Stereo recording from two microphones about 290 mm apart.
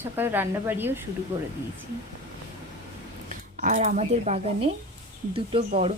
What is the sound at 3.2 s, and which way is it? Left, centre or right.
Speech, right.